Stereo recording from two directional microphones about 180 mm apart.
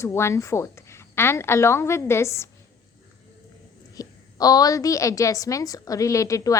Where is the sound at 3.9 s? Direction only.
20° left (ahead or behind).